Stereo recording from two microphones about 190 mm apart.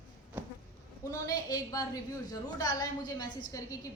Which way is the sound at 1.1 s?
20° left (ahead or behind).